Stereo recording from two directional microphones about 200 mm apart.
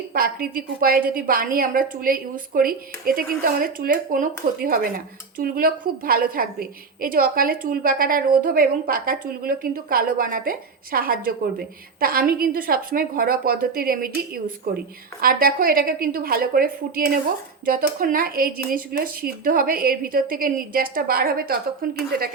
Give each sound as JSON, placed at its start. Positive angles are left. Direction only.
{"t": 0.1, "sound": "a woman's voice", "side_deg": -45}